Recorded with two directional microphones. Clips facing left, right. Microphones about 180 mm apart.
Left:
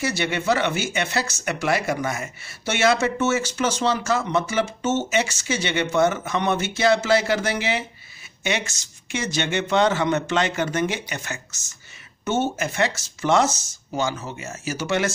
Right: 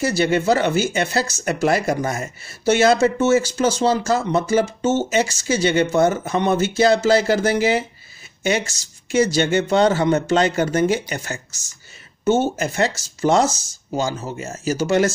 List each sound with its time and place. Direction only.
0.0 s speech: 35° right (ahead or behind)
12.5 s speech: 35° right (ahead or behind)